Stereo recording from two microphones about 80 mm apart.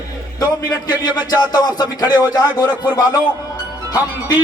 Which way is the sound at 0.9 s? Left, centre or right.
Left.